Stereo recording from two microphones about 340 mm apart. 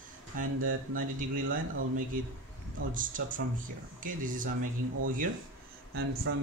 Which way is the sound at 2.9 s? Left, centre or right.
Right.